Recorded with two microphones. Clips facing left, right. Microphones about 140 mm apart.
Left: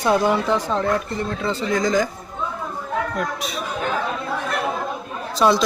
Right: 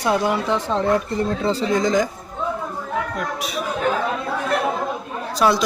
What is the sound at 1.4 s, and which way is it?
Speech, 35° right (ahead or behind).